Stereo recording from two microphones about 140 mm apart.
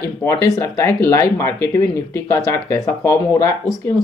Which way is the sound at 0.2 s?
20° left (ahead or behind).